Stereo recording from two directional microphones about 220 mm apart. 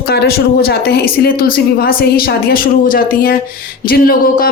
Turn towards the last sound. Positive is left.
turn(degrees=40)  # may be behind; listen again after turning